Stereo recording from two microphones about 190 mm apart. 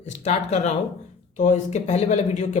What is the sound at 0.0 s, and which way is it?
A woman's voice, 35° left (ahead or behind).